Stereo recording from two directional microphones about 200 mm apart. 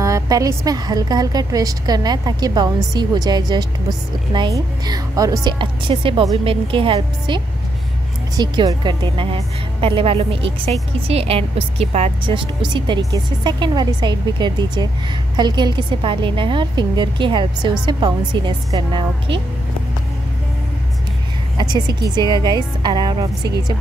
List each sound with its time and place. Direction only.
0.0 s a woman's voice: 15° right (ahead or behind)
21.5 s a woman's voice: 20° right (ahead or behind)